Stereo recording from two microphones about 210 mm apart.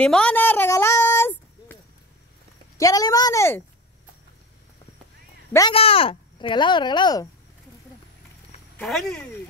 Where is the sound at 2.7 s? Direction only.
15° left (ahead or behind).